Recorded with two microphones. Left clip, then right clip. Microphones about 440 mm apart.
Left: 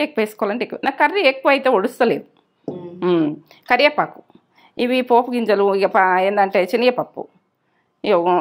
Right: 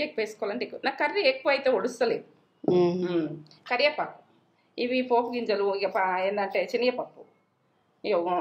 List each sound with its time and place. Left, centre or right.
0.0 s a woman's voice: left
4.7 s a woman's voice: left
8.0 s a woman's voice: left